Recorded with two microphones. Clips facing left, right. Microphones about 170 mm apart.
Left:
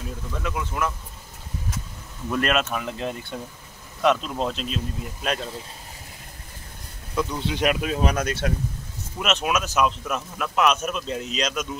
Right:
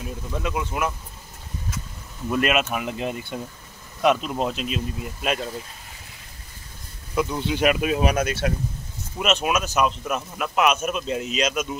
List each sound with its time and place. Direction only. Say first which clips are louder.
0.4 s speech: right 1 dB; 20° right (ahead or behind)
2.2 s speech: right 1 dB; 5° right (ahead or behind)
7.2 s speech: right 2 dB; 5° right (ahead or behind)